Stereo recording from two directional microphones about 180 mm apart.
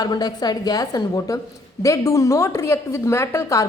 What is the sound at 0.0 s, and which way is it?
A woman's voice, 20° left (ahead or behind).